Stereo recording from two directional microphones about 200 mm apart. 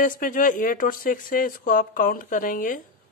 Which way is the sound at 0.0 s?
40° left (ahead or behind).